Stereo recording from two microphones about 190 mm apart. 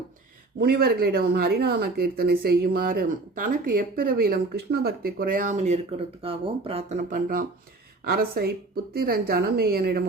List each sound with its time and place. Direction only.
0.6 s speech: 55° right (ahead or behind)